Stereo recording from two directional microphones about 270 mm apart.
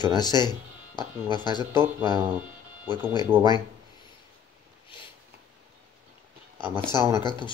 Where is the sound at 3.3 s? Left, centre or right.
Centre.